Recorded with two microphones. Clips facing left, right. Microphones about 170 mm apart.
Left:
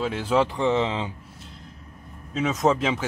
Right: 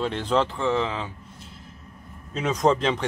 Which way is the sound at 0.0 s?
5° left (ahead or behind).